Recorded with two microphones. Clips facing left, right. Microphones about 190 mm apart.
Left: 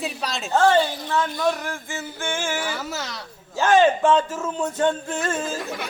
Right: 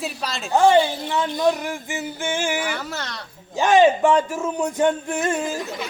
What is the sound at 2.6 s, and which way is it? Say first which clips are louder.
Speech: right 1 dB; centre (ahead or behind).